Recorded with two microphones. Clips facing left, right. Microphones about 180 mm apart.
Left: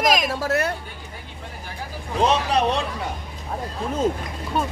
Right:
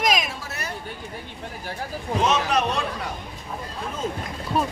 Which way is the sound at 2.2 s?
30° left (ahead or behind).